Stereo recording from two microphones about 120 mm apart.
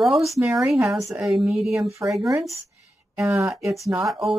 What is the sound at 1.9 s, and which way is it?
Speech, 25° right (ahead or behind).